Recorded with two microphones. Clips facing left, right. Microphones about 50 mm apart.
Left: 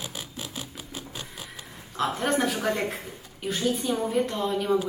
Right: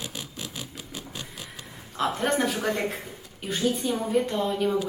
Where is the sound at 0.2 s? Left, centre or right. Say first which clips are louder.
Even; centre.